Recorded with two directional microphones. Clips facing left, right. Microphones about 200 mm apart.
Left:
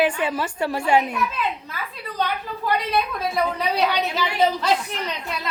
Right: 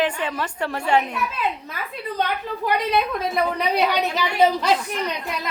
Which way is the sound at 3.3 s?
15° right (ahead or behind).